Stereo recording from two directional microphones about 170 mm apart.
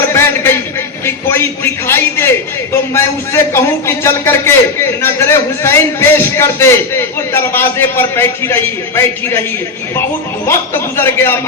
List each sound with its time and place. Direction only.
0.1 s a sound: 15° left (ahead or behind)
1.0 s a man's voice: 15° left (ahead or behind)
10.4 s a man's voice: 15° left (ahead or behind)